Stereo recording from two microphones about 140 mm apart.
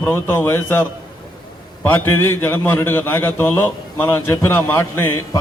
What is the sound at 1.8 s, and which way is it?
A man's voice, 15° left (ahead or behind).